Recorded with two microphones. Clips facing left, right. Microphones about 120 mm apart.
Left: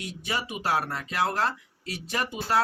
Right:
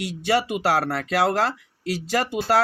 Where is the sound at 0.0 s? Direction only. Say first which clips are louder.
Right 10 dB; 80° right.